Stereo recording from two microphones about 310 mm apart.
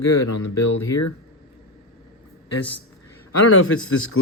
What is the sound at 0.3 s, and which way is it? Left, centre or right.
Speech, left.